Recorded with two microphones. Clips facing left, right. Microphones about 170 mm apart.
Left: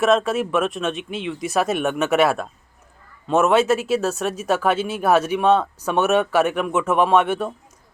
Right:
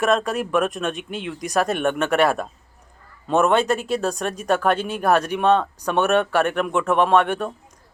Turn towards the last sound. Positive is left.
turn(degrees=5)  # may be behind; listen again after turning